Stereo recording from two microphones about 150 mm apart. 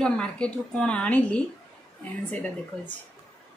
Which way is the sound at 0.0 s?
5° left (ahead or behind).